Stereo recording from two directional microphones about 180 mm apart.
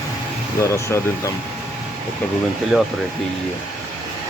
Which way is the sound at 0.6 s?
15° left (ahead or behind).